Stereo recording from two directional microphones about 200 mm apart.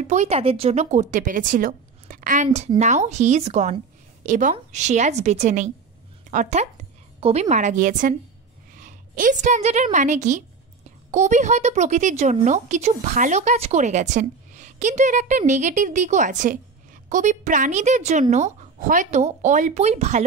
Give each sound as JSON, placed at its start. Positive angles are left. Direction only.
{"t": 0.0, "sound": "a woman's voice", "side_deg": -35}